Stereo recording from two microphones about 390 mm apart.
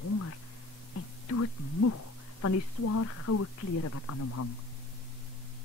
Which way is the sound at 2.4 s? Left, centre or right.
Left.